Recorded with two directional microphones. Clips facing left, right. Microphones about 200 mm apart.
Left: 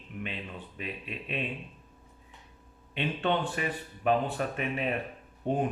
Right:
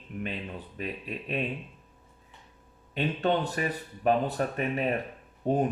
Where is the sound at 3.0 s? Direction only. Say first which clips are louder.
Right 2 dB; 40° right (ahead or behind).